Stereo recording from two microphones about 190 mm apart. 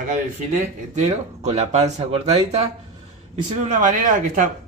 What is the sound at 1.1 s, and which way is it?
Speech, 35° right (ahead or behind).